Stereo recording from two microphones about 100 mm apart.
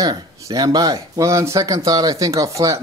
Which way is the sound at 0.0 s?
40° right (ahead or behind).